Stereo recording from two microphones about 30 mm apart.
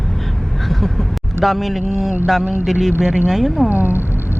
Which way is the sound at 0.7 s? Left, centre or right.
Centre.